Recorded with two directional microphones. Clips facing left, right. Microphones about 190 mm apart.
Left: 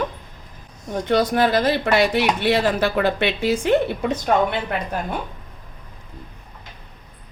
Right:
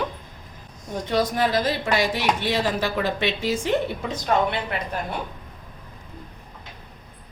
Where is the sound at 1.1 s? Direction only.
65° left (ahead or behind).